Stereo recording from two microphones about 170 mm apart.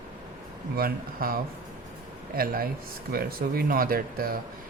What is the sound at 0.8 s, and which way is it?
A man's voice, 60° right (ahead or behind).